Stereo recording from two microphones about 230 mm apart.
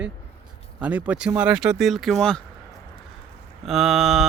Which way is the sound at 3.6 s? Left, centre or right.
Centre.